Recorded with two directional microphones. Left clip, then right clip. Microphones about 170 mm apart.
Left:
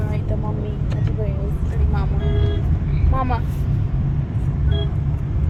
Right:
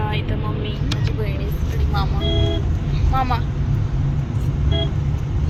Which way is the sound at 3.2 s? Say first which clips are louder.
Right 2 dB; 40° left (ahead or behind).